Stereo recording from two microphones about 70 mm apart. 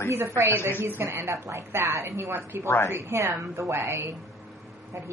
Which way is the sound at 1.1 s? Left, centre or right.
Right.